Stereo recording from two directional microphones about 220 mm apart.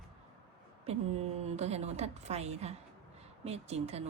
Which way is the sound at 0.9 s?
30° right (ahead or behind).